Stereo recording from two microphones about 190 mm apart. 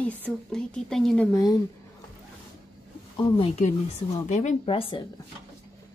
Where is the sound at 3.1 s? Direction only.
25° left (ahead or behind).